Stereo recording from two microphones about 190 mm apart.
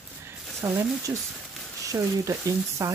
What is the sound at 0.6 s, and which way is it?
Speech, 15° right (ahead or behind).